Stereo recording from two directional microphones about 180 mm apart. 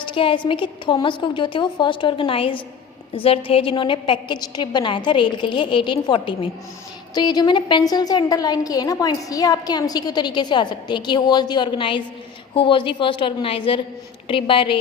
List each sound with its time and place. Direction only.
0.1 s a woman's voice: 30° left (ahead or behind)